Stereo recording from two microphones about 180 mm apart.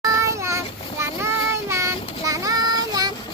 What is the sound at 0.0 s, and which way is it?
Child singing, 15° right (ahead or behind).